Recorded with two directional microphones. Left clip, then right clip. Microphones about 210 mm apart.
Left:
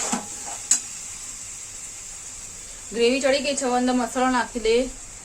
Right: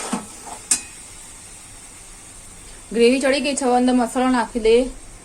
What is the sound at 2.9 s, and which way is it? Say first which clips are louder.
A woman's voice: right 4 dB; 25° right (ahead or behind).